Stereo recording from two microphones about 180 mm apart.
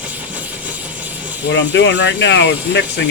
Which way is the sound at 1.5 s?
75° left (ahead or behind).